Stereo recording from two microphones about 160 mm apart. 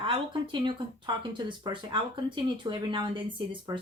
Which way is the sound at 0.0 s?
30° right (ahead or behind).